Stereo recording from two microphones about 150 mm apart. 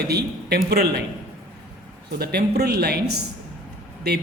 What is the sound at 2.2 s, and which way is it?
A man's voice, 90° right.